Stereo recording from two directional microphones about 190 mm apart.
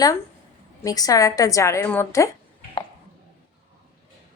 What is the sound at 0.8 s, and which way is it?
A woman's voice, 20° left (ahead or behind).